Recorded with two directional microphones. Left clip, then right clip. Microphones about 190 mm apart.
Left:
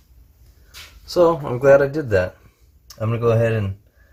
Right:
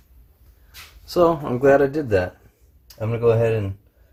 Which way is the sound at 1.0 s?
25° right (ahead or behind).